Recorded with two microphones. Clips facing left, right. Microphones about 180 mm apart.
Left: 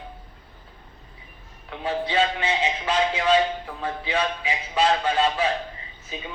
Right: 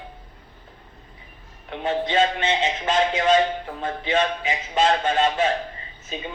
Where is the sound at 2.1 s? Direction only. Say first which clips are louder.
Right 2 dB; 45° right (ahead or behind).